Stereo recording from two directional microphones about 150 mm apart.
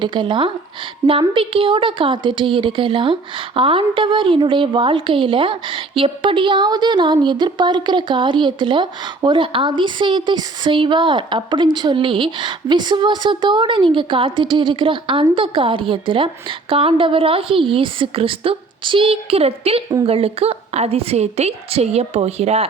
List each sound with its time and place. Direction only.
0.0 s a woman's voice: 30° right (ahead or behind)